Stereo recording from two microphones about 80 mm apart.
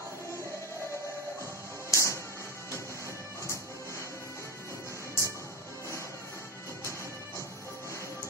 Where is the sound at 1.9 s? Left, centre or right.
Left.